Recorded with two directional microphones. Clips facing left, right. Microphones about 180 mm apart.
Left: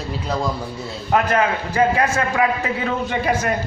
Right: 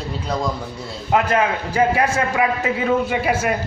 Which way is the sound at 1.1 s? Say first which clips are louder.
Even; 15° right (ahead or behind).